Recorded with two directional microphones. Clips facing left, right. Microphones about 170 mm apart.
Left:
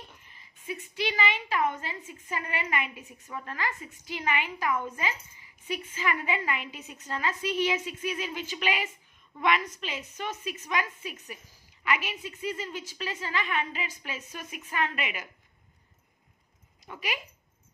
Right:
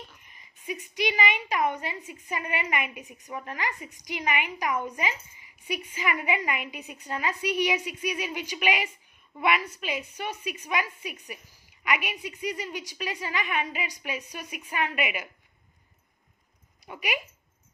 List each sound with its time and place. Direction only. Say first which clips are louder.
0.2 s a woman's voice: right 2 dB; 15° right (ahead or behind)
16.8 s speech: right 3 dB; 15° right (ahead or behind)